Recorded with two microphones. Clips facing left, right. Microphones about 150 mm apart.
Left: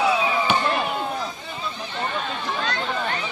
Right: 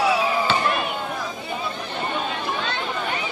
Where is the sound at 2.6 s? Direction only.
25° right (ahead or behind).